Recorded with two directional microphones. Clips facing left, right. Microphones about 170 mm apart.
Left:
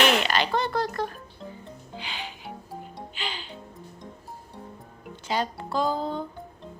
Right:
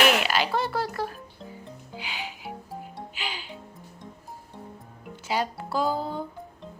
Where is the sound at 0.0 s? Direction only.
5° right (ahead or behind).